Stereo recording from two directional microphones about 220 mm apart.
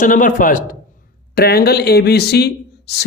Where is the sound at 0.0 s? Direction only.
35° left (ahead or behind).